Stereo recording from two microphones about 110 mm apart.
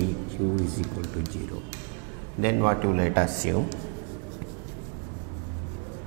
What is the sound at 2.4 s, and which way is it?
Speech, 20° right (ahead or behind).